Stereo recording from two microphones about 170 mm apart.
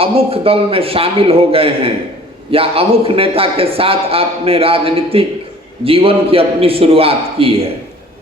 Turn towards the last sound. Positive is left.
turn(degrees=-35)  # may be behind; listen again after turning